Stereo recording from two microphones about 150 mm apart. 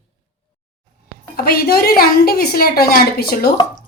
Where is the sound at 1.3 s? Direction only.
90° left.